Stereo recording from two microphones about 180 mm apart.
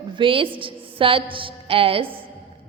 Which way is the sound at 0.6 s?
30° right (ahead or behind).